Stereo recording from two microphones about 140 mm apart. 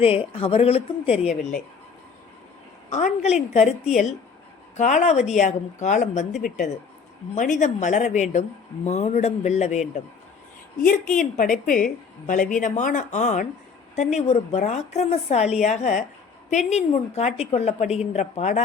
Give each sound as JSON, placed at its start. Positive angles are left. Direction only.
{"t": 0.0, "sound": "a woman's voice", "side_deg": 45}
{"t": 2.9, "sound": "a woman's voice", "side_deg": 55}
{"t": 4.8, "sound": "speech", "side_deg": 60}
{"t": 7.3, "sound": "speech", "side_deg": 65}
{"t": 10.8, "sound": "a woman's voice", "side_deg": 70}